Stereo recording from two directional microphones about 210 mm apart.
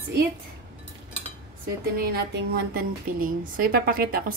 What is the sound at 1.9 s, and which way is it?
A woman's voice, 50° right (ahead or behind).